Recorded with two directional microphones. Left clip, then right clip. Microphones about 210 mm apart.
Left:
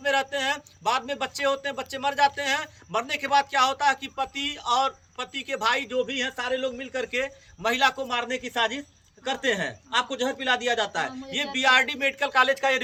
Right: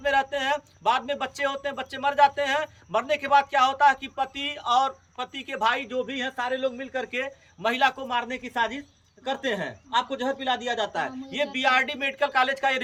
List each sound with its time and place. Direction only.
0.0 s speech: 10° right (ahead or behind)